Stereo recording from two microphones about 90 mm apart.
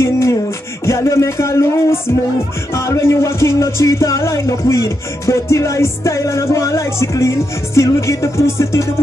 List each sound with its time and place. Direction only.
0.0 s music: 30° left (ahead or behind)